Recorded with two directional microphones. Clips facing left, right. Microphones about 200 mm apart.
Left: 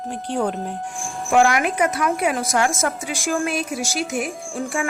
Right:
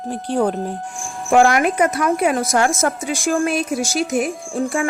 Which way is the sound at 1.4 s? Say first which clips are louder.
Right 3 dB; 40° right (ahead or behind).